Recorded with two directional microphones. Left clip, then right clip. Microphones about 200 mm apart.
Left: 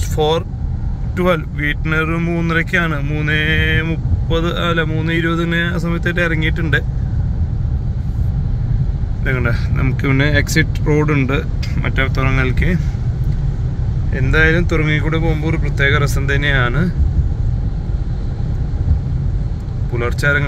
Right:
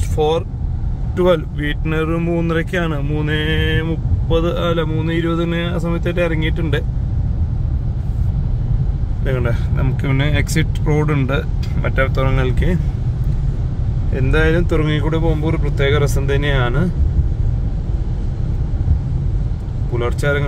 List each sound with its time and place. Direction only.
0.1 s speech: 5° right (ahead or behind)
1.1 s speech: 20° right (ahead or behind)
9.2 s speech: 15° right (ahead or behind)
14.1 s speech: 15° right (ahead or behind)
19.9 s speech: 15° right (ahead or behind)